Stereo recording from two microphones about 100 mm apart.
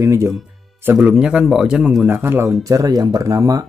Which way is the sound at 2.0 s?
20° right (ahead or behind).